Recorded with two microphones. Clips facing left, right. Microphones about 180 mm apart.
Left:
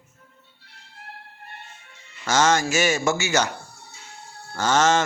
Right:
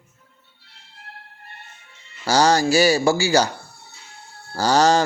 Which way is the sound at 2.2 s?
35° right (ahead or behind).